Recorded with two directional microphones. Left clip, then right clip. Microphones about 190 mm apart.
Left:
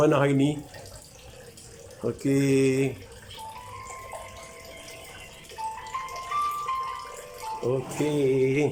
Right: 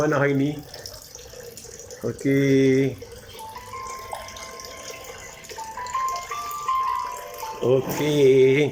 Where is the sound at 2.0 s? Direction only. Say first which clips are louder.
Right 3 dB; 5° left (ahead or behind).